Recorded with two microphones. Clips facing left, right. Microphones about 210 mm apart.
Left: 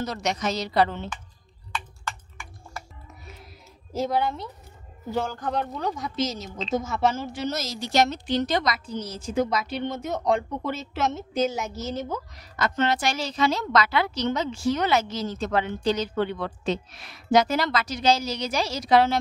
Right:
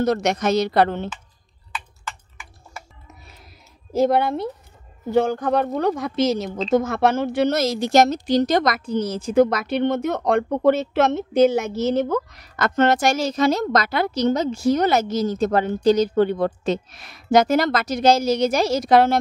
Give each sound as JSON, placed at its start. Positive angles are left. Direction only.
{"t": 0.0, "sound": "a woman's voice", "side_deg": -55}
{"t": 2.0, "sound": "typing", "side_deg": -5}
{"t": 3.9, "sound": "a woman's voice", "side_deg": -60}